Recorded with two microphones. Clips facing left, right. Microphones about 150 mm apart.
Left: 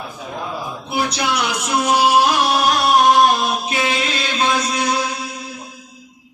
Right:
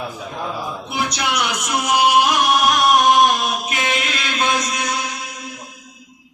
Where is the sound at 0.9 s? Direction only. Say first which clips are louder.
Left 4 dB; 30° left (ahead or behind).